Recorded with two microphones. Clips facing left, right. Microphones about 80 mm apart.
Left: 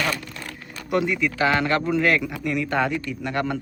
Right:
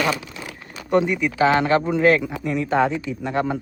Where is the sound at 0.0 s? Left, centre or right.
Centre.